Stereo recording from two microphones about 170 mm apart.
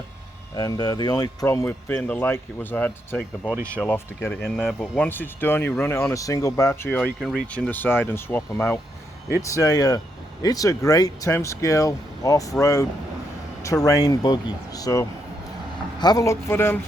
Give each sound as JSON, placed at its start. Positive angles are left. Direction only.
{"t": 0.5, "sound": "speech", "side_deg": 20}
{"t": 3.5, "sound": "speech", "side_deg": -15}
{"t": 3.8, "sound": "speech", "side_deg": 10}